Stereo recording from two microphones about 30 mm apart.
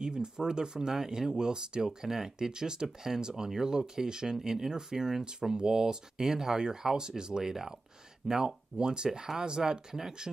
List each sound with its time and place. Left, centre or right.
0.0 s speech: right
1.3 s speech: right
2.0 s speech: centre
7.4 s speech: centre